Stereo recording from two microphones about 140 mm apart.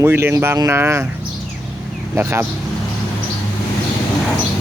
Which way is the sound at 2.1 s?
15° right (ahead or behind).